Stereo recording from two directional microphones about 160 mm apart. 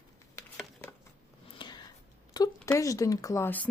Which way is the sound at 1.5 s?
30° left (ahead or behind).